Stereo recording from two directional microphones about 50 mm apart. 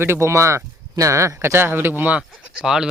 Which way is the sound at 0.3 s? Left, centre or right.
Right.